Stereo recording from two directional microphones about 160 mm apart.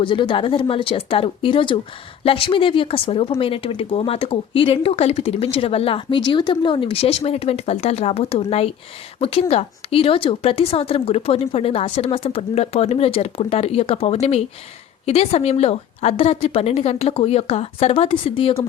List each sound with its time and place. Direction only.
0.0 s speech: 30° left (ahead or behind)